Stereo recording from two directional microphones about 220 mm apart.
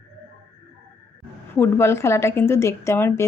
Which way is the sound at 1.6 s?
10° left (ahead or behind).